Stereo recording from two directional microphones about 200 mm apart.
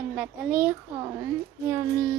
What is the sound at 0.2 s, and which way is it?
Child singing, 10° right (ahead or behind).